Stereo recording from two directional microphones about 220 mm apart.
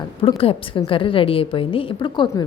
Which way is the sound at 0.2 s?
25° left (ahead or behind).